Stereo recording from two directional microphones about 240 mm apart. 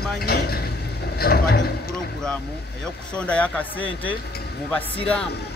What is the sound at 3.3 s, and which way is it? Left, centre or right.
Speech, centre.